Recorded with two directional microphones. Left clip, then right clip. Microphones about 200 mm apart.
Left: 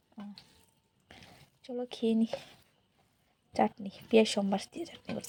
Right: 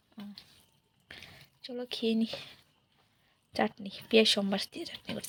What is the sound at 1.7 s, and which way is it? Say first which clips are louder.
Speech: even; 5° left (ahead or behind).